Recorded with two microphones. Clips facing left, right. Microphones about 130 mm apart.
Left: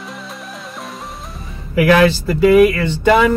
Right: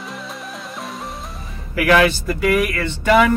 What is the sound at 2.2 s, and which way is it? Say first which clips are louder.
Speech: left 8 dB; 25° left (ahead or behind).